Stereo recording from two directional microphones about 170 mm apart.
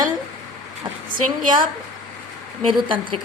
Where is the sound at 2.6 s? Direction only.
30° right (ahead or behind).